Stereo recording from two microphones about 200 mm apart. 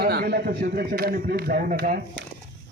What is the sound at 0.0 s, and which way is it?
A man's voice, 50° right (ahead or behind).